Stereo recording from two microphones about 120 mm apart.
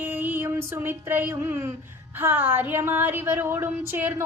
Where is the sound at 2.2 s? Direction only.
15° right (ahead or behind).